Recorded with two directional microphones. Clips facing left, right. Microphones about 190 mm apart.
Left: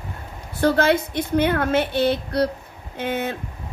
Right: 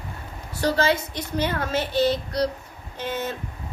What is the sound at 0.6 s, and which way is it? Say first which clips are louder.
A woman's voice: left 4 dB; 55° left (ahead or behind).